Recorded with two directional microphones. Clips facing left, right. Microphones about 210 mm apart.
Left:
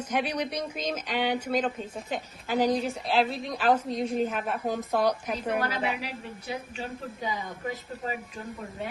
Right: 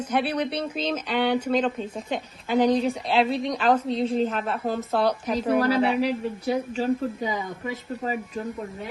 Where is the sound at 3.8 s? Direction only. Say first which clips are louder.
Right 5 dB; 30° right (ahead or behind).